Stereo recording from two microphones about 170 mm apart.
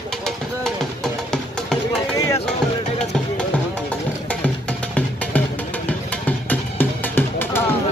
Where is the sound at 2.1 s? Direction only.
20° left (ahead or behind).